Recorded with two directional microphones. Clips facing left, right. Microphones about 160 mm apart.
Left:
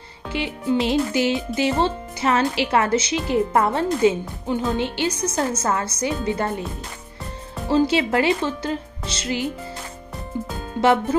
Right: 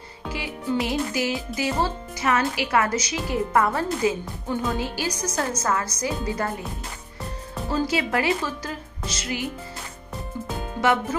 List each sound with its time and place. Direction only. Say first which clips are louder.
0.3 s speech: left 5 dB; 25° left (ahead or behind)
7.7 s speech: left 6 dB; 25° left (ahead or behind)
10.8 s speech: left 4 dB; 30° left (ahead or behind)